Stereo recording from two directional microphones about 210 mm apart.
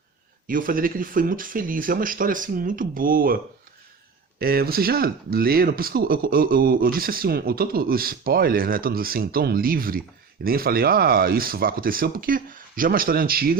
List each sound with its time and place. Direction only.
0.4 s speech: 40° right (ahead or behind)
4.4 s speech: 45° right (ahead or behind)